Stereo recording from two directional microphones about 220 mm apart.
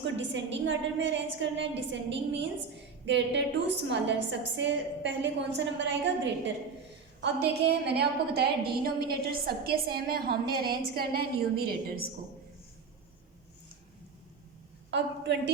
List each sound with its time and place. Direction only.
0.0 s a woman's voice: 55° right (ahead or behind)
7.2 s a woman's voice: 50° right (ahead or behind)
14.8 s a woman's voice: 50° right (ahead or behind)